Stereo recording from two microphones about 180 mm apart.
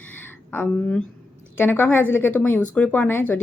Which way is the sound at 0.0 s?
10° left (ahead or behind).